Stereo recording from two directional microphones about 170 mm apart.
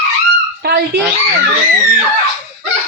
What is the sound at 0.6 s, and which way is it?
Dog, 70° right (ahead or behind).